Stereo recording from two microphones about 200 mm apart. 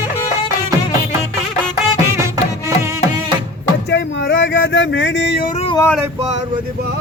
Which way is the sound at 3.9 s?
55° left (ahead or behind).